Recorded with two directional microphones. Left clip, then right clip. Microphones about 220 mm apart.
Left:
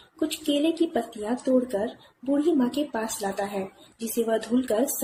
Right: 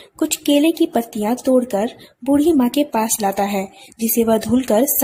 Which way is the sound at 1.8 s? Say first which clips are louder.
Right 8 dB; 50° right (ahead or behind).